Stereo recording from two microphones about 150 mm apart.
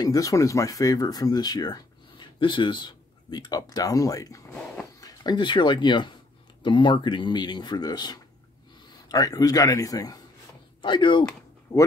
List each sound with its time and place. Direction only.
0.0 s speech: 25° left (ahead or behind)
11.7 s speech: 20° left (ahead or behind)